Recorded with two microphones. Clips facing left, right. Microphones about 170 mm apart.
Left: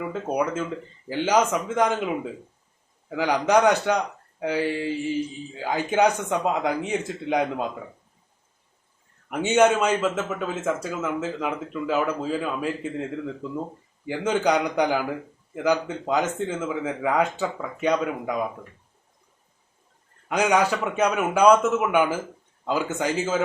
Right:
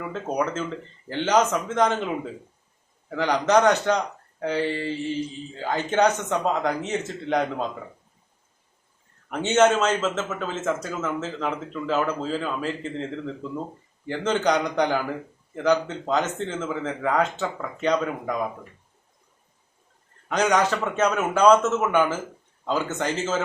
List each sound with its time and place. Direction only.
0.1 s speech: 10° left (ahead or behind)
3.1 s speech: 10° left (ahead or behind)
9.3 s speech: 10° left (ahead or behind)
20.2 s speech: 10° left (ahead or behind)